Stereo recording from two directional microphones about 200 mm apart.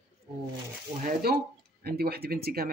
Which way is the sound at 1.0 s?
50° right (ahead or behind).